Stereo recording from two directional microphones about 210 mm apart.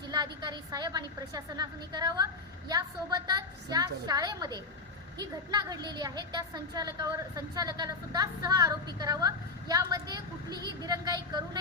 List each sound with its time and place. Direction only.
0.1 s a woman's voice: 20° right (ahead or behind)